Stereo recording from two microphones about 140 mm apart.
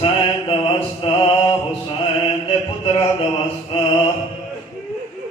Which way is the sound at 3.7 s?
35° left (ahead or behind).